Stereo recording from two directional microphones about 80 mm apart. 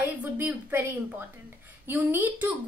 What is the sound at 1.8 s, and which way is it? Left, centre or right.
Speech, right.